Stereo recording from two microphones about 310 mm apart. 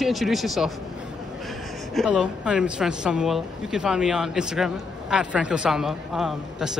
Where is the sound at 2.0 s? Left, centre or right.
Centre.